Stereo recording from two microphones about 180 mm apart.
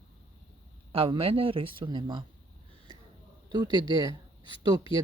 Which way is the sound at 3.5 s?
25° right (ahead or behind).